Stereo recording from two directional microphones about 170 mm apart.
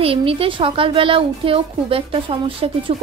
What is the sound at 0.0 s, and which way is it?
A woman's voice, 35° right (ahead or behind).